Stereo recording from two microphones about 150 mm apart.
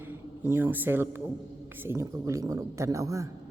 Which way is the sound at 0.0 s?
15° right (ahead or behind).